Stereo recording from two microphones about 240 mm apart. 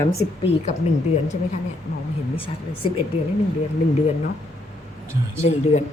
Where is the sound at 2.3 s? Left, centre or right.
Left.